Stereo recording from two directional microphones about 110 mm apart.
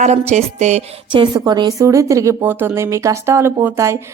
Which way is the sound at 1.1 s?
45° right (ahead or behind).